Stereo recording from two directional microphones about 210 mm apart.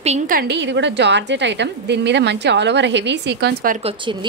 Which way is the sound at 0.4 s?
55° right (ahead or behind).